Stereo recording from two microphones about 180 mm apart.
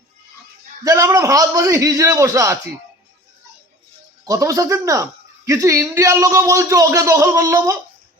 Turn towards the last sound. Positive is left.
turn(degrees=-15)  # may be behind; listen again after turning